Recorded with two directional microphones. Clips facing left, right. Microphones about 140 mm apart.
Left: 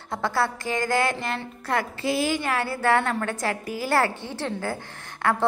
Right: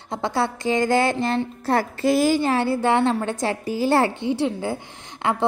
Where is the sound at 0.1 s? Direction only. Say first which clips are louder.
Right 2 dB; 20° right (ahead or behind).